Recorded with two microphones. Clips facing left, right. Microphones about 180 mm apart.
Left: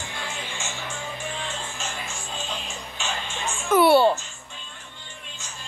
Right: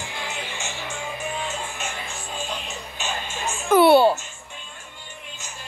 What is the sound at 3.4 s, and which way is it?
Music, 40° right (ahead or behind).